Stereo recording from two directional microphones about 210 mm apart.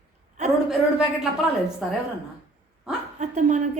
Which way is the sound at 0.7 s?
5° right (ahead or behind).